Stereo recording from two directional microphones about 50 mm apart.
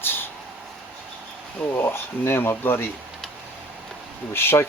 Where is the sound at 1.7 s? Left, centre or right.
Left.